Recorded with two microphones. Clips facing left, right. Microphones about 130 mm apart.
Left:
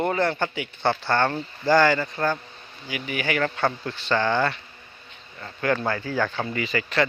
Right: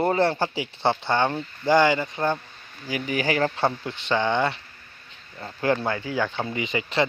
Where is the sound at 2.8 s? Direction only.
35° right (ahead or behind).